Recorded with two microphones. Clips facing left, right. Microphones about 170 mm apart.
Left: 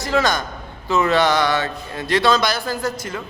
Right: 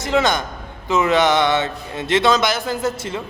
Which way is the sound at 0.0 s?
20° right (ahead or behind).